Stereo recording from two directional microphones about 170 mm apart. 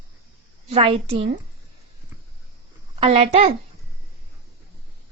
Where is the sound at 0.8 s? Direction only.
35° right (ahead or behind).